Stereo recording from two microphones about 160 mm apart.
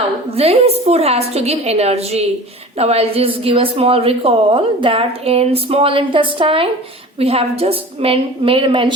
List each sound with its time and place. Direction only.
0.3 s a woman's voice: 40° right (ahead or behind)